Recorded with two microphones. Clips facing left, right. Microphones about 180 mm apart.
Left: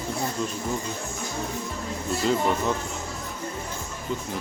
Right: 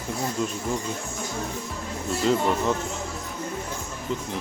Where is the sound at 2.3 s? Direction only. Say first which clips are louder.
Right 2 dB; centre (ahead or behind).